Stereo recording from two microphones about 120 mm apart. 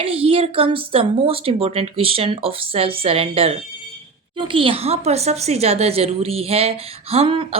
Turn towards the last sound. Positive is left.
turn(degrees=-50)  # may be behind; listen again after turning